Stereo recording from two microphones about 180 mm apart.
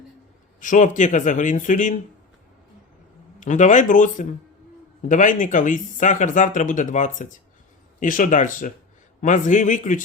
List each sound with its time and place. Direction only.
0.6 s speech: 45° left (ahead or behind)
3.4 s speech: 45° left (ahead or behind)